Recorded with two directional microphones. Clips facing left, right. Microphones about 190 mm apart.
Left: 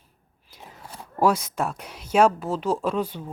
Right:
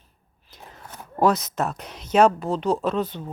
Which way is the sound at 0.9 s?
10° left (ahead or behind).